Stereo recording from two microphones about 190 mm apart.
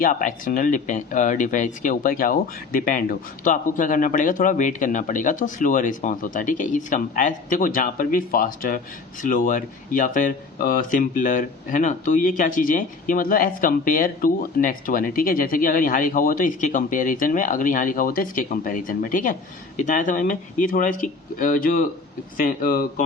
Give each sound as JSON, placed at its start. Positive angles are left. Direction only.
{"t": 0.0, "sound": "speech", "side_deg": 45}